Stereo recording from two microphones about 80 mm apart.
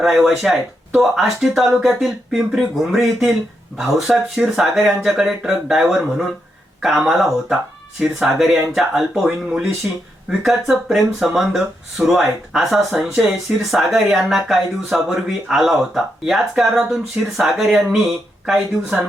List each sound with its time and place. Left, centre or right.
0.0 s speech: centre
9.8 s speech: centre
10.4 s speech: centre
18.9 s speech: centre